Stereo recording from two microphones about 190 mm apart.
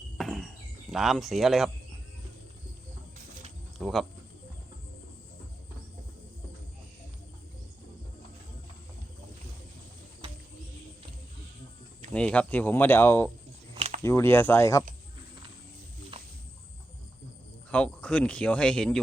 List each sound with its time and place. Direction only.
0.2 s cricket: centre (ahead or behind)
3.8 s speech: centre (ahead or behind)
12.1 s speech: 5° left (ahead or behind)
13.7 s a sound: 35° right (ahead or behind)
14.0 s speech: 15° left (ahead or behind)
17.7 s speech: 5° left (ahead or behind)